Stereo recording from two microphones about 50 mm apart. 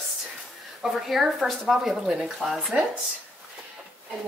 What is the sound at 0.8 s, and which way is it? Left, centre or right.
Speech, centre.